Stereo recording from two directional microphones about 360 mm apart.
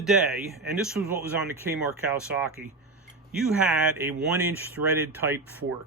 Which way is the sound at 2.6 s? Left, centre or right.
Right.